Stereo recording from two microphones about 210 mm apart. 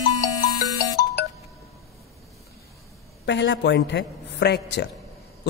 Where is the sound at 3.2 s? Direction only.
55° left (ahead or behind).